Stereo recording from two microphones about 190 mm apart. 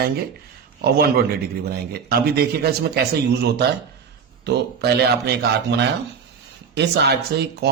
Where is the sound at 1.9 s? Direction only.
55° right (ahead or behind).